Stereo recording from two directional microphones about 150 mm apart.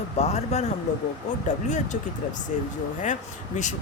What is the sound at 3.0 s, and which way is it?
Speech, 55° left (ahead or behind).